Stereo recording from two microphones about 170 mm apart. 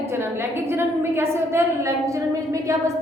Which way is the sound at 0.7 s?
15° right (ahead or behind).